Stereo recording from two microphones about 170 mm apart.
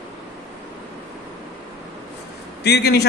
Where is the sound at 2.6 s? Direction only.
80° left.